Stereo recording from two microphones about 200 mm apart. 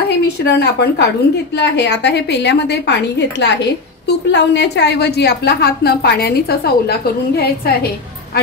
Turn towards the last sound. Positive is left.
turn(degrees=50)  # may be behind; listen again after turning